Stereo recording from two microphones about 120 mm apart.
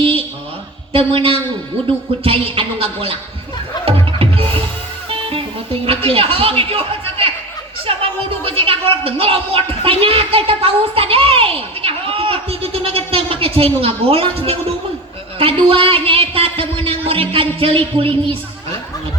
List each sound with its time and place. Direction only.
0.0 s a sound: 50° right (ahead or behind)
0.9 s a woman's voice: 50° right (ahead or behind)
3.8 s music: 50° right (ahead or behind)
5.0 s speech: 45° right (ahead or behind)
7.9 s a sound: 50° right (ahead or behind)
8.4 s a woman's voice: 50° right (ahead or behind)